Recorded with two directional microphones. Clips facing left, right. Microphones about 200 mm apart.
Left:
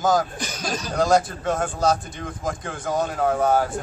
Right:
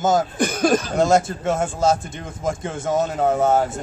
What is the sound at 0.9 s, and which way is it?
A man's voice, 25° right (ahead or behind).